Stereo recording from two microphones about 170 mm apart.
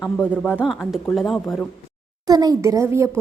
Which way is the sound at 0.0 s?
10° left (ahead or behind).